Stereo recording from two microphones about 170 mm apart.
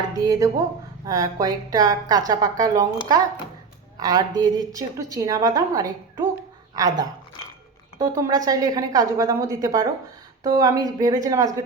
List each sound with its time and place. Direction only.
0.3 s a woman's voice: 20° right (ahead or behind)
3.9 s a woman's voice: 25° right (ahead or behind)